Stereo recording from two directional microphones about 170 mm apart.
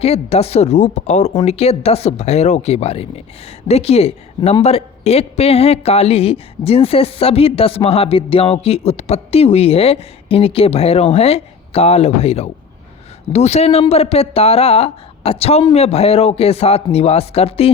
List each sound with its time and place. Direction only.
0.0 s a woman's voice: 35° left (ahead or behind)